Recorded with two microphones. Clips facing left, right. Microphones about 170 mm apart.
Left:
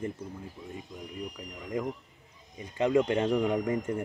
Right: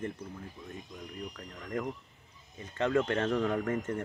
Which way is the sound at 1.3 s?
15° left (ahead or behind).